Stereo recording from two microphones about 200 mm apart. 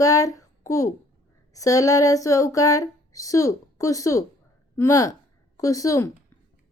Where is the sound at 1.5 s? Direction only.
15° left (ahead or behind).